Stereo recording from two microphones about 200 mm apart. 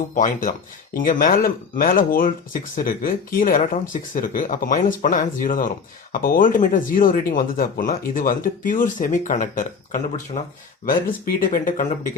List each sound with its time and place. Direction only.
0.1 s speech: 40° left (ahead or behind)